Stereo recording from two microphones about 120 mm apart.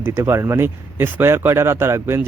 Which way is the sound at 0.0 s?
20° right (ahead or behind).